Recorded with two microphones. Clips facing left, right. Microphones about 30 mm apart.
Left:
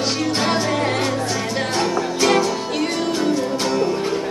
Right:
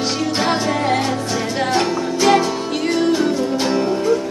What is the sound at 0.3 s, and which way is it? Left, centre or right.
Music, centre.